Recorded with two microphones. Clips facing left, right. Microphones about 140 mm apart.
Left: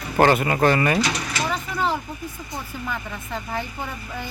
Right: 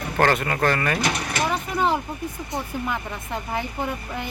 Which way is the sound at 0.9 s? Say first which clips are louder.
Left 1 dB; 55° right (ahead or behind).